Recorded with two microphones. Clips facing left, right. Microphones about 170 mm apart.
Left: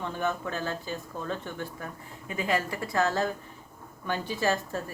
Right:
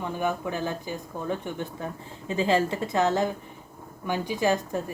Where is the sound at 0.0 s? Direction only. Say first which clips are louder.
Right 3 dB; 10° right (ahead or behind).